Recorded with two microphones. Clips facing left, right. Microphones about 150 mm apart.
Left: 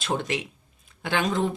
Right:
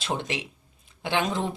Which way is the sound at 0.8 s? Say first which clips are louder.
Even; 25° right (ahead or behind).